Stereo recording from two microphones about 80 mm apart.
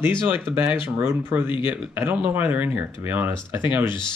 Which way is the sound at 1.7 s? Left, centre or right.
Right.